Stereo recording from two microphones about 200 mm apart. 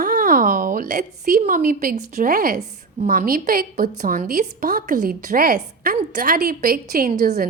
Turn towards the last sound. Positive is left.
turn(degrees=-45)  # may be behind; listen again after turning